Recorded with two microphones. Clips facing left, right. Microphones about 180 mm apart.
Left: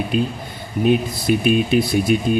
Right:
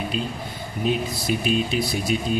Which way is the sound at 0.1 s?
55° left (ahead or behind).